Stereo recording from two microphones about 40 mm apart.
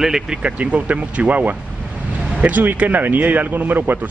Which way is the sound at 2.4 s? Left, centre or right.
Right.